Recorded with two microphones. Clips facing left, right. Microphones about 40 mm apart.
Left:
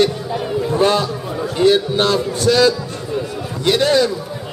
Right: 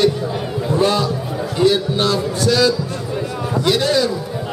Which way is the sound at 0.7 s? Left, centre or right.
Centre.